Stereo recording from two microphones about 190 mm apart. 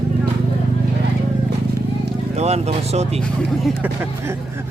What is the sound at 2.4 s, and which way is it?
Speech, 35° right (ahead or behind).